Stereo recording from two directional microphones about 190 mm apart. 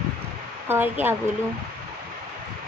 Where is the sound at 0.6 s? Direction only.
10° right (ahead or behind).